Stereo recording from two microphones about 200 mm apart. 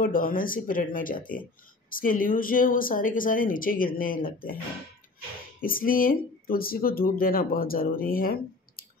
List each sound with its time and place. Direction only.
0.0 s speech: 45° left (ahead or behind)
5.6 s speech: 45° left (ahead or behind)